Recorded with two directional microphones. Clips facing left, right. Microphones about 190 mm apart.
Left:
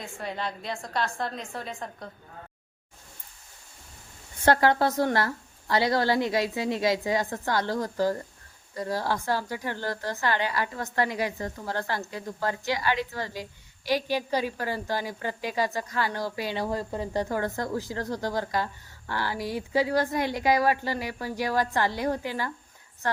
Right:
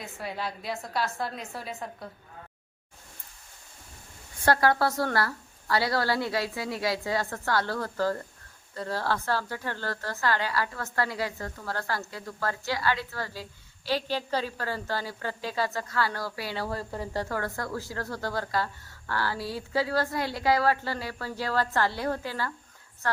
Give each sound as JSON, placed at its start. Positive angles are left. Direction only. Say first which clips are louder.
{"t": 0.0, "sound": "a woman's voice", "louder": "left 1 dB", "side_deg": -5}
{"t": 4.4, "sound": "a woman's voice", "louder": "left 2 dB", "side_deg": 20}